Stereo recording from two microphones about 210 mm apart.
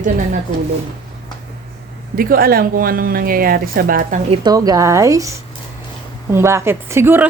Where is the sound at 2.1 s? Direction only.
45° right (ahead or behind).